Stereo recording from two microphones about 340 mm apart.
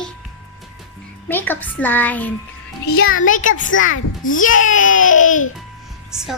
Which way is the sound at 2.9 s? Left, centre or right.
Left.